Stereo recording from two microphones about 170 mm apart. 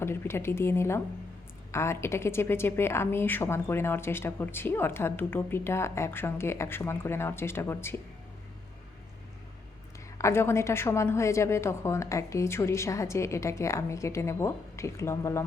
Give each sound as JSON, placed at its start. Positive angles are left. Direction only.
{"t": 0.0, "sound": "a woman's voice", "side_deg": 15}
{"t": 10.2, "sound": "a woman's voice", "side_deg": 15}